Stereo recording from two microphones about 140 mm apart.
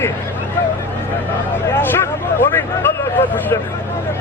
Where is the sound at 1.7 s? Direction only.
15° left (ahead or behind).